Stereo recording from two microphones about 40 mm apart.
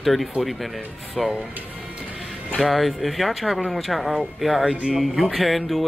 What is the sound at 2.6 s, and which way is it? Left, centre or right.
Speech, centre.